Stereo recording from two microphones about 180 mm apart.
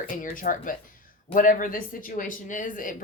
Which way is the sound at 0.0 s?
50° left (ahead or behind).